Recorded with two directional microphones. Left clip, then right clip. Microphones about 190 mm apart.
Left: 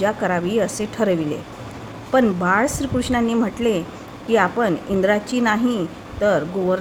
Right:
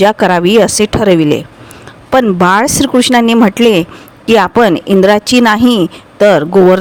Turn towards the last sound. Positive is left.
turn(degrees=-50)  # may be behind; listen again after turning